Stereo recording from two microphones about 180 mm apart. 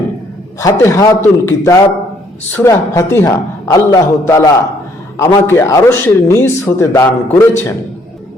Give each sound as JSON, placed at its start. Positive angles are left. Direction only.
{"t": 0.6, "sound": "speech", "side_deg": 15}